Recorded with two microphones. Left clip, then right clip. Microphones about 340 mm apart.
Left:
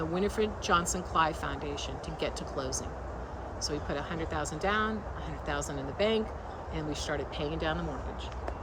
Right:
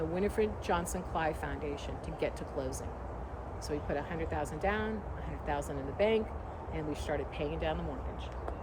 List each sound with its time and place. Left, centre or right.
0.1 s speech: left